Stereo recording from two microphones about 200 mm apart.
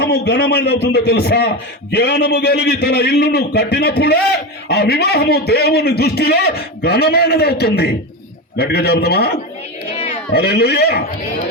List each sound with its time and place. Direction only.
0.0 s a man's voice: 55° left (ahead or behind)
10.3 s a man's voice: 55° left (ahead or behind)